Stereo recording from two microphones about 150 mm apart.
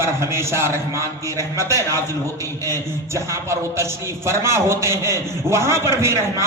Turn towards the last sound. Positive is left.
turn(degrees=-20)  # may be behind; listen again after turning